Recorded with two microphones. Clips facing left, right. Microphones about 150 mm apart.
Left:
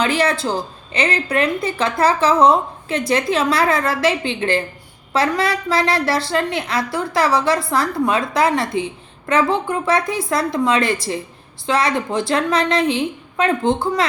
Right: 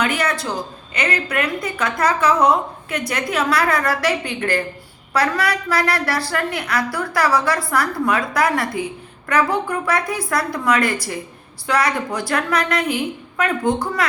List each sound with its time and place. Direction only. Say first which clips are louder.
0.0 s a woman's voice: left 3 dB; 30° left (ahead or behind)